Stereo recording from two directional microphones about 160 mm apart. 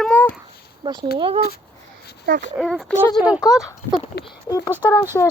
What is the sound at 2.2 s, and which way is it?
Speech, 80° right.